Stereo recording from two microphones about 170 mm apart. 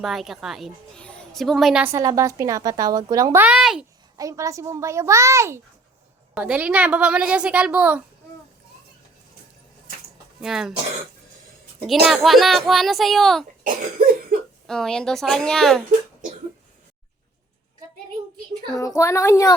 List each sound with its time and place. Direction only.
0.0 s a woman's voice: centre (ahead or behind)
1.9 s a woman's voice: 20° right (ahead or behind)
3.4 s a child's voice: 5° right (ahead or behind)
4.2 s a woman's voice: 20° right (ahead or behind)
10.4 s a child's voice: centre (ahead or behind)
12.0 s a child's voice: 5° right (ahead or behind)
13.7 s cough: 55° right (ahead or behind)
14.7 s a child's voice: 5° left (ahead or behind)
18.8 s speech: 20° left (ahead or behind)